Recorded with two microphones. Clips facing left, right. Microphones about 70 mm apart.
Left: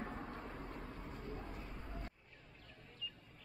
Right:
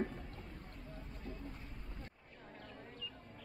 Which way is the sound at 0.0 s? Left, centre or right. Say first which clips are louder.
Right 3 dB; left.